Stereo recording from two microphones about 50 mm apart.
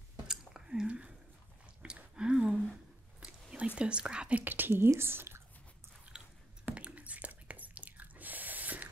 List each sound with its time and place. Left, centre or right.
0.3 s squish: centre
1.8 s a sound: centre
3.2 s whispering: centre
3.5 s speech: right
6.1 s biting: centre
6.7 s whispering: right